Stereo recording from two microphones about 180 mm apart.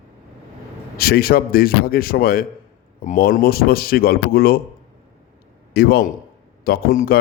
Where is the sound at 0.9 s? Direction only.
60° left (ahead or behind).